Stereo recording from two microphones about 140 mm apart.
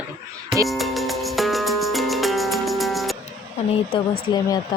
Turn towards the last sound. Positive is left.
turn(degrees=30)  # may be behind; listen again after turning